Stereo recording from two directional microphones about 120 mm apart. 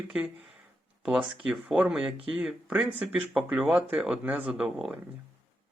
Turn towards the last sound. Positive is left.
turn(degrees=-5)  # may be behind; listen again after turning